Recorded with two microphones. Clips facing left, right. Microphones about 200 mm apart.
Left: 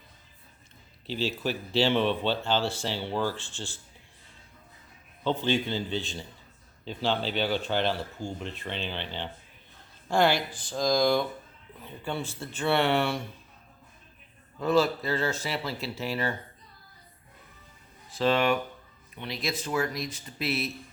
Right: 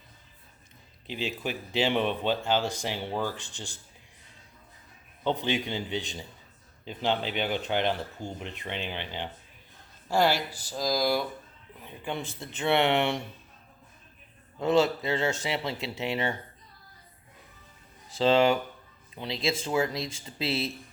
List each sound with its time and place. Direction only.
1.0 s speech: 55° right (ahead or behind)
1.7 s speech: 15° right (ahead or behind)
5.2 s speech: 20° right (ahead or behind)
14.6 s speech: 25° right (ahead or behind)
18.1 s speech: 25° right (ahead or behind)